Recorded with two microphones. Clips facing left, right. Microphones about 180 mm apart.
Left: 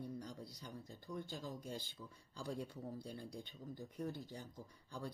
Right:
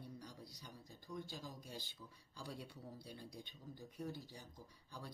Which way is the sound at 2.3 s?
45° left (ahead or behind).